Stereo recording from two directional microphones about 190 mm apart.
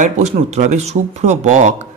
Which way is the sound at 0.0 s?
40° right (ahead or behind).